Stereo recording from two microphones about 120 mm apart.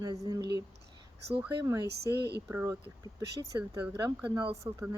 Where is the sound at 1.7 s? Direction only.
25° right (ahead or behind).